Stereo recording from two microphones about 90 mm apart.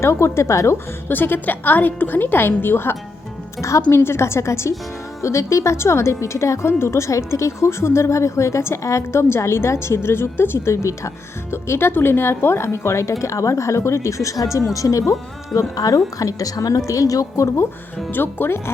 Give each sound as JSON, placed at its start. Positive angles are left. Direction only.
{"t": 0.0, "sound": "a woman's voice", "side_deg": 30}
{"t": 18.1, "sound": "a woman's voice", "side_deg": 25}